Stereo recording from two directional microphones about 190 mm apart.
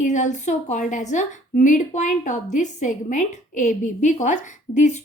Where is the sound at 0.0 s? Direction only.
40° left (ahead or behind).